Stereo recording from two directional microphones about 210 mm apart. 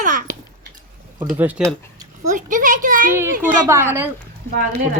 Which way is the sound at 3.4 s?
10° right (ahead or behind).